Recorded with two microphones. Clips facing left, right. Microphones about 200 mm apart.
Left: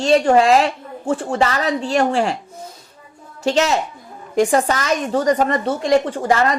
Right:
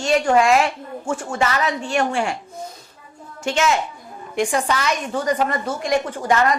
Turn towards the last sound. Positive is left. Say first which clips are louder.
# left 2 dB
turn(degrees=30)  # may be behind; listen again after turning